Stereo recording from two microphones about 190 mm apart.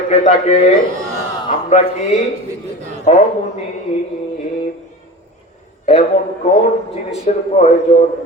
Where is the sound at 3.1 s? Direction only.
40° left (ahead or behind).